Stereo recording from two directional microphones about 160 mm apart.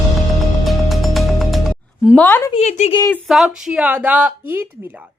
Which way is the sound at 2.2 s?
15° left (ahead or behind).